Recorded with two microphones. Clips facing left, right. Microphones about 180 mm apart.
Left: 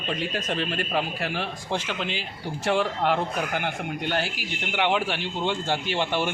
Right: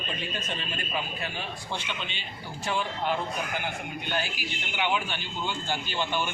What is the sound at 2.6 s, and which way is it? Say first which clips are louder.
A man's voice: left 6 dB; 80° left.